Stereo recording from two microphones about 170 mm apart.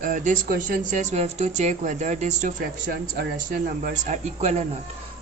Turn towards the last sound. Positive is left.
turn(degrees=-40)  # may be behind; listen again after turning